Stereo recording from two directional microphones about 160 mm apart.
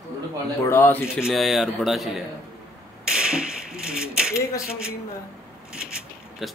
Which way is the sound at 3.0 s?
5° right (ahead or behind).